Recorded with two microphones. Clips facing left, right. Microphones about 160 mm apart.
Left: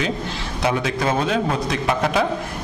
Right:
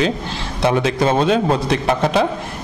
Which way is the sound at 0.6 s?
30° right (ahead or behind).